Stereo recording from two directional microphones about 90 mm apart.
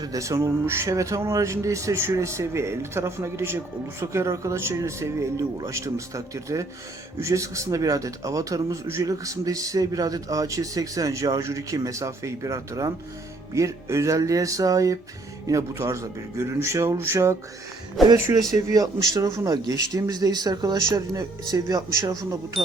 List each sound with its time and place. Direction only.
0.0 s a man's voice: 40° right (ahead or behind)
18.0 s speech: centre (ahead or behind)
18.5 s speech: 40° right (ahead or behind)